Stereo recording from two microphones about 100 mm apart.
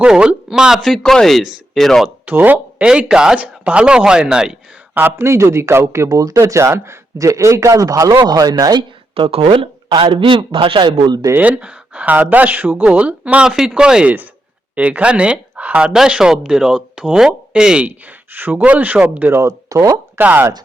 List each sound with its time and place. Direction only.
0.0 s speech: 10° right (ahead or behind)
2.0 s speech: 15° right (ahead or behind)
4.9 s speech: 20° right (ahead or behind); by 8.5 s 40° right (ahead or behind)
8.7 s a man's voice: 60° right (ahead or behind)
11.3 s speech: 15° right (ahead or behind)
19.4 s speech: 35° right (ahead or behind)
20.1 s speech: 20° right (ahead or behind)